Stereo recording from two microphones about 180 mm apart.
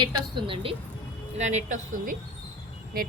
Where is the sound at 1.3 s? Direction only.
40° right (ahead or behind).